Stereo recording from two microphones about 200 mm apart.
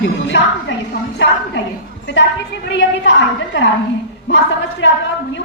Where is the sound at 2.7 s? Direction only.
65° left (ahead or behind).